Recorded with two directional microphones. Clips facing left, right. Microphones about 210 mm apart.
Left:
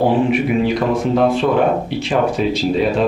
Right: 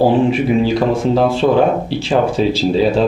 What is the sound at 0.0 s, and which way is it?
Speech, 30° right (ahead or behind).